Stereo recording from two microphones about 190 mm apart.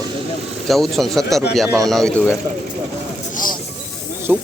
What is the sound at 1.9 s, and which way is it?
Speech, centre (ahead or behind).